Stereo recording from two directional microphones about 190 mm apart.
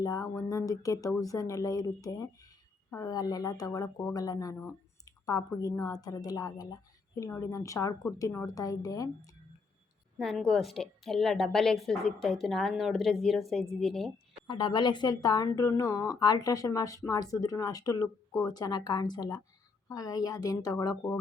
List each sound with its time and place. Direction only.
0.0 s a woman's voice: 20° left (ahead or behind)
10.2 s a woman's voice: centre (ahead or behind)
14.4 s speech: 25° left (ahead or behind)